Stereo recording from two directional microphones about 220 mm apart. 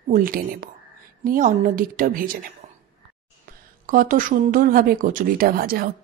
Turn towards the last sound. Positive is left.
turn(degrees=-40)  # may be behind; listen again after turning